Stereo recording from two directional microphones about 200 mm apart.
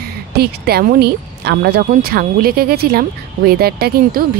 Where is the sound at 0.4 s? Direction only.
50° right (ahead or behind).